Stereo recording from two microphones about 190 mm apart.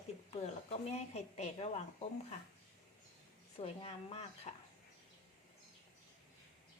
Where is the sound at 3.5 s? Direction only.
35° left (ahead or behind).